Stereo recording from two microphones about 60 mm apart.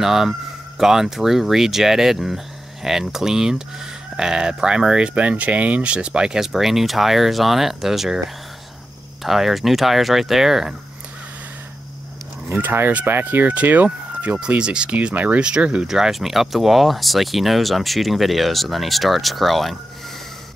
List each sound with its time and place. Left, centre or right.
0.0 s speech: centre
9.2 s speech: centre
12.5 s speech: right; by 15.9 s centre
15.9 s speech: centre